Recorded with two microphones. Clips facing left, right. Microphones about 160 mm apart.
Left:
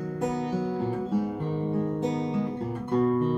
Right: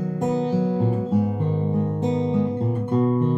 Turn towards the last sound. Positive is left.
turn(degrees=-20)  # may be behind; listen again after turning